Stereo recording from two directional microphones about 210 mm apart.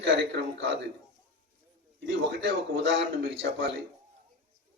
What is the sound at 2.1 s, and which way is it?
A man's voice, 55° right (ahead or behind).